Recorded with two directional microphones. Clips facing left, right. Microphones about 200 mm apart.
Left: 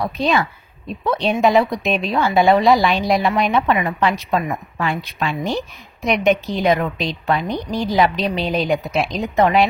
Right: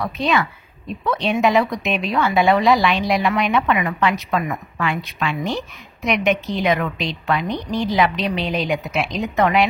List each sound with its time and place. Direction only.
0.0 s speech: 35° left (ahead or behind)